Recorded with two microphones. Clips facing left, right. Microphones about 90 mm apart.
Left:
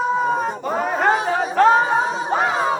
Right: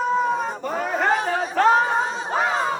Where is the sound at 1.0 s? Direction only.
15° left (ahead or behind).